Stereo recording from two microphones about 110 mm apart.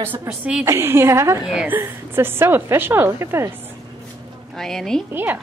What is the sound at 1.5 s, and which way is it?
A woman's voice, 15° right (ahead or behind).